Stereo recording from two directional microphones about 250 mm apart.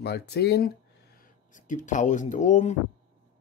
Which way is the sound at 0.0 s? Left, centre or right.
Left.